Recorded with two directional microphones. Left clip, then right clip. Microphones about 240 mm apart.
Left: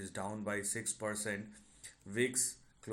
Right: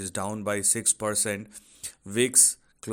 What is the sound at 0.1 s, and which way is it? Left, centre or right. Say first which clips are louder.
Speech: right 10 dB; right.